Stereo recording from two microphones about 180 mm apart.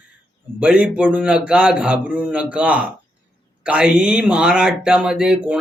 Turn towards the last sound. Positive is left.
turn(degrees=-5)  # may be behind; listen again after turning